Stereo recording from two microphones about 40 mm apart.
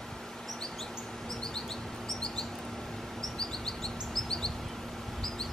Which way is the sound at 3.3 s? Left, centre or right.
Centre.